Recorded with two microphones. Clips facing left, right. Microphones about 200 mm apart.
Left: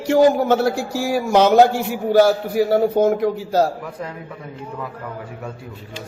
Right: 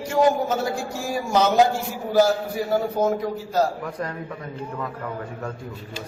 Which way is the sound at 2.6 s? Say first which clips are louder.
Left 9 dB; 75° left (ahead or behind).